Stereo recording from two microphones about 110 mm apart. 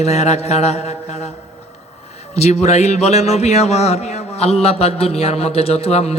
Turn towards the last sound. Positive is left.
turn(degrees=70)  # may be behind; listen again after turning